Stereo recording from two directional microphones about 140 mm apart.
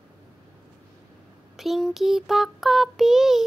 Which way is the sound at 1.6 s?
Centre (ahead or behind).